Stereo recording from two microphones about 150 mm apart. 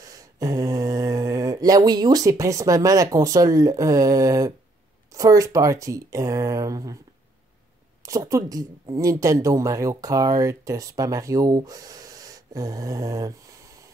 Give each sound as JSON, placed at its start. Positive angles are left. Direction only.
{"t": 0.0, "sound": "speech", "side_deg": -25}
{"t": 8.0, "sound": "speech", "side_deg": -20}